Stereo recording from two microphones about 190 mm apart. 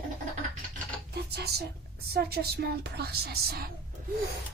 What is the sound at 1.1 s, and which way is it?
A woman's voice, 60° right (ahead or behind).